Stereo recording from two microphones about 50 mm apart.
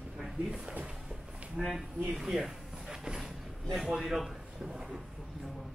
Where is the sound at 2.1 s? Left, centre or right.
Centre.